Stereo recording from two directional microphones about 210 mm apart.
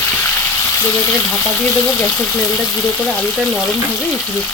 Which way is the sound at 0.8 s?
10° left (ahead or behind).